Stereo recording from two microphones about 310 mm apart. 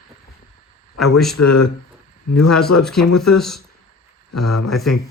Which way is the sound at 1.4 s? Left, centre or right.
Left.